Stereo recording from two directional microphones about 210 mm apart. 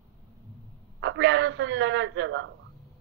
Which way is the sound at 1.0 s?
60° right (ahead or behind).